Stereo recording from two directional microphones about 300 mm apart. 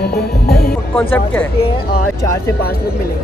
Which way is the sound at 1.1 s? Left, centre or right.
Centre.